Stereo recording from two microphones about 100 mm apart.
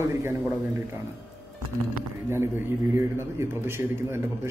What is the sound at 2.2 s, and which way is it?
A man's voice, 25° right (ahead or behind).